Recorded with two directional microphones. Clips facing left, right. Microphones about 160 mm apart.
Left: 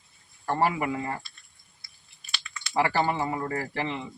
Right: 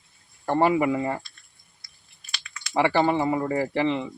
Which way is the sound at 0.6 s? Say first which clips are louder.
Right 6 dB; 25° right (ahead or behind).